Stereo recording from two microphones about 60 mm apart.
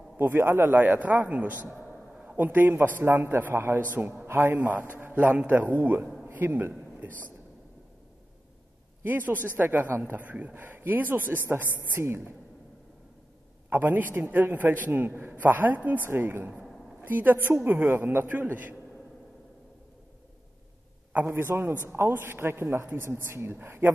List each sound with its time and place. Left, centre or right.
0.2 s a man's voice: right
9.0 s a man's voice: right
12.0 s a man's voice: right
13.7 s a man's voice: right
21.3 s a man's voice: right